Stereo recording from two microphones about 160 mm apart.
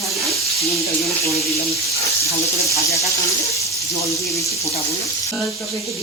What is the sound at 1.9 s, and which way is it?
Speech, 20° left (ahead or behind).